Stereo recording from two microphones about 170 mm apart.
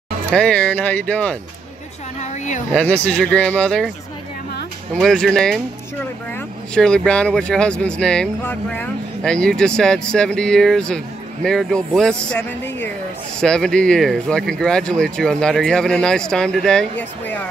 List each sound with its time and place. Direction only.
0.4 s speech: 5° left (ahead or behind)
2.1 s a woman's voice: 45° left (ahead or behind)
2.7 s speech: 10° left (ahead or behind)
4.9 s speech: centre (ahead or behind)